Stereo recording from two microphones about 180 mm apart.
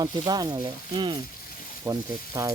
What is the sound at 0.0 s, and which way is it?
Speech, 20° right (ahead or behind).